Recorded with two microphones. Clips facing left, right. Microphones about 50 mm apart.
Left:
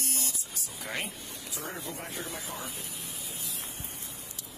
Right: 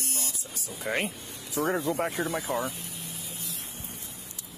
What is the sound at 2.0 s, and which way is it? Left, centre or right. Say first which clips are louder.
Speech: right 10 dB; right.